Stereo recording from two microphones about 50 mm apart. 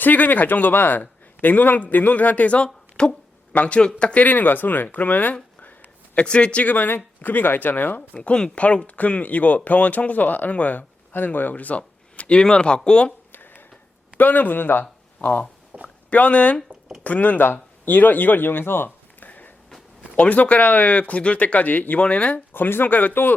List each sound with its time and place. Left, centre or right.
0.0 s a man's voice: left; by 4.2 s centre
4.2 s a man's voice: left
6.1 s a man's voice: left
8.1 s a man's voice: centre
12.1 s a sound: left
12.4 s speech: centre
13.3 s a sound: left
14.2 s speech: left
15.8 s a man's voice: left
19.2 s a sound: left
20.1 s speech: left
22.5 s a man's voice: left